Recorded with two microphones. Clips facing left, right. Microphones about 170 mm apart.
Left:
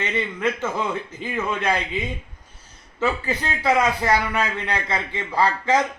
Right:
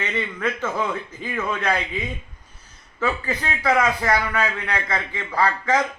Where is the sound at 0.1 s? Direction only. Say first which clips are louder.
Left 2 dB; 15° left (ahead or behind).